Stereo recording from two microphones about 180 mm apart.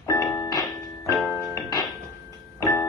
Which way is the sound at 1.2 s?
Centre (ahead or behind).